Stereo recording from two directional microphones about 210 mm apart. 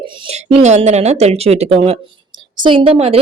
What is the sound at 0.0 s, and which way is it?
A woman's voice, 30° right (ahead or behind).